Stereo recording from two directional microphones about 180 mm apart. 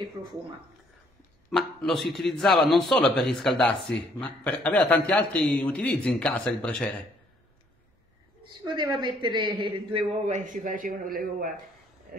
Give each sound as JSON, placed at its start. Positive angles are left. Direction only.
{"t": 1.5, "sound": "a man's voice", "side_deg": 5}
{"t": 8.6, "sound": "a woman's voice", "side_deg": -25}
{"t": 10.2, "sound": "a man's voice", "side_deg": -45}